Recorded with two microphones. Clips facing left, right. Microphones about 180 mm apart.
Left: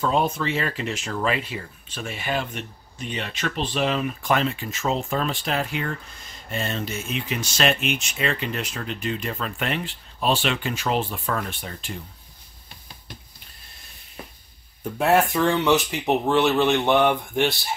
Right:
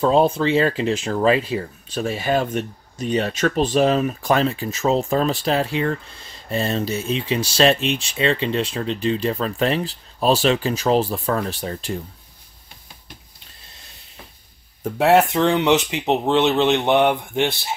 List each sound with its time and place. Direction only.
0.0 s speech: 30° right (ahead or behind)
15.0 s speech: 75° right (ahead or behind)
15.3 s speech: 20° right (ahead or behind)